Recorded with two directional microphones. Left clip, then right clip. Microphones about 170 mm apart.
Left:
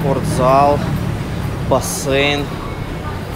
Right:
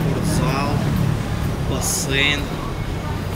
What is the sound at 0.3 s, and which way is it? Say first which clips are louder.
Speech: left 13 dB; 20° left (ahead or behind).